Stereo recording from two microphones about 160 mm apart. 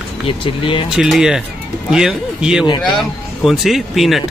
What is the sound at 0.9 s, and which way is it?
A man's voice, 5° right (ahead or behind).